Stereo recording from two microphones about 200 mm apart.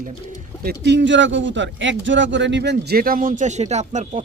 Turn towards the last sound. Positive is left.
turn(degrees=-35)  # may be behind; listen again after turning